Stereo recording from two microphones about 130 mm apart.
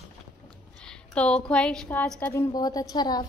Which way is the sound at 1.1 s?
10° left (ahead or behind).